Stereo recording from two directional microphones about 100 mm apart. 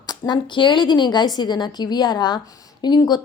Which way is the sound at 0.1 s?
50° left (ahead or behind).